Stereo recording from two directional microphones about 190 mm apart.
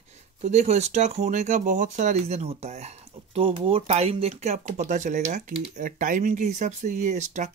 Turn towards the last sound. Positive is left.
turn(degrees=-40)  # may be behind; listen again after turning